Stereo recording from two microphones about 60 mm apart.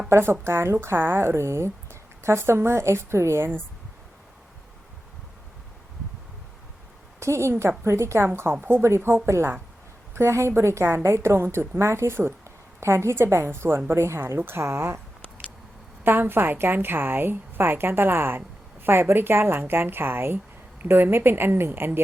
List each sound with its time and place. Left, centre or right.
0.1 s speech: right
7.2 s a woman's voice: right
16.0 s a woman's voice: right